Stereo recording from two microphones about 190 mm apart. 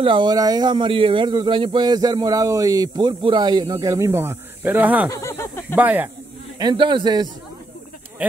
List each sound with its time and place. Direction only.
0.0 s speech: 25° right (ahead or behind); by 5.1 s 10° right (ahead or behind)
5.1 s a sound: 15° left (ahead or behind)
5.8 s speech: 10° right (ahead or behind)
6.6 s speech: 25° right (ahead or behind)
8.2 s speech: 10° right (ahead or behind)